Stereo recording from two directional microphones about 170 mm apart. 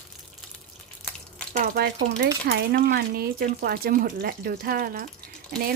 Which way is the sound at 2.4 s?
65° right (ahead or behind).